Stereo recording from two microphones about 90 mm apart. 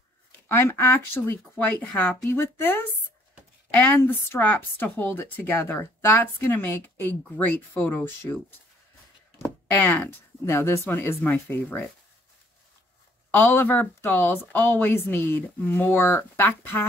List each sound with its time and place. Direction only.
0.3 s speech: 25° left (ahead or behind)
2.2 s speech: 30° left (ahead or behind)
9.8 s speech: 20° left (ahead or behind)
13.3 s speech: 25° left (ahead or behind)